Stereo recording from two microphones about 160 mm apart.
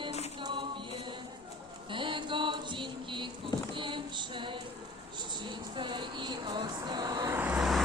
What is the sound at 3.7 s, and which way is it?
Child singing, 30° right (ahead or behind).